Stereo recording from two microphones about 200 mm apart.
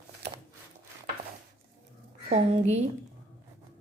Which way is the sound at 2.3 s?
35° right (ahead or behind).